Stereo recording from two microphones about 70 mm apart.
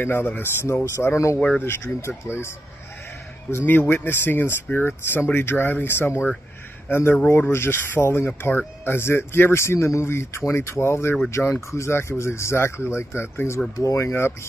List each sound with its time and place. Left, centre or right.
0.0 s speech: left
3.6 s speech: left
13.7 s speech: left